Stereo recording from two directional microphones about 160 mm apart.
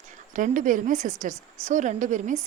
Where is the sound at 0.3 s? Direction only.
55° right (ahead or behind).